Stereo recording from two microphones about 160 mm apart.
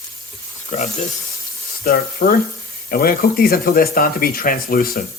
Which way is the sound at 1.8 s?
65° left (ahead or behind).